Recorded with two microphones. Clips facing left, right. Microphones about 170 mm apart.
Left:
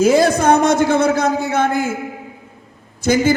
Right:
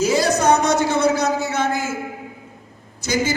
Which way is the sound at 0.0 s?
55° left (ahead or behind).